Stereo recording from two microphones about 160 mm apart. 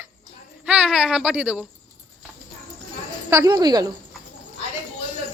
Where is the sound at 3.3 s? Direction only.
25° right (ahead or behind).